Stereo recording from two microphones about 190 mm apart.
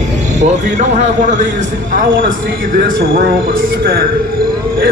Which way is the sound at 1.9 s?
45° right (ahead or behind).